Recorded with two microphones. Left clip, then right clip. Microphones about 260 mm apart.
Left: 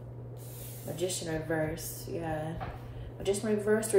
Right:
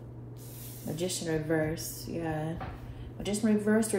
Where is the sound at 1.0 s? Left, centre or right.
Right.